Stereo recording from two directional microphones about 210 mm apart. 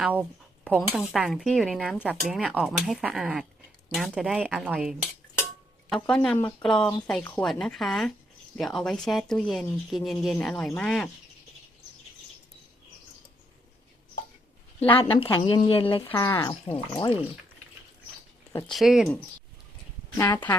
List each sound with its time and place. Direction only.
0.0 s speech: 10° right (ahead or behind)
14.8 s a woman's voice: 25° left (ahead or behind)
16.1 s speech: 10° left (ahead or behind)
18.5 s speech: centre (ahead or behind)
20.1 s speech: 10° left (ahead or behind)